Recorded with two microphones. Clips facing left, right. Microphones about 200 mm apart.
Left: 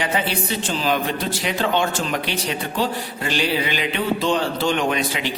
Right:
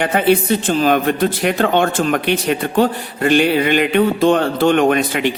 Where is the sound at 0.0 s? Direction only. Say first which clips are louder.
Right 9 dB; 55° right (ahead or behind).